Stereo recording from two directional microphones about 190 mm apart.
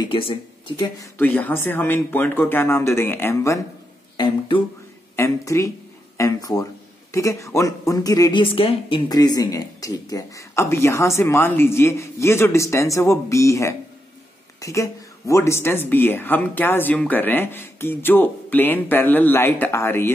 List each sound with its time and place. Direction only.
0.0 s speech: 25° left (ahead or behind)
5.1 s speech: 15° left (ahead or behind)